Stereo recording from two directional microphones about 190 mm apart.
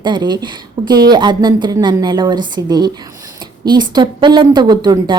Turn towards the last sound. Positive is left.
turn(degrees=-20)  # may be behind; listen again after turning